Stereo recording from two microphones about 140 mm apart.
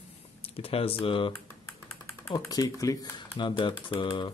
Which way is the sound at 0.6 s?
45° left (ahead or behind).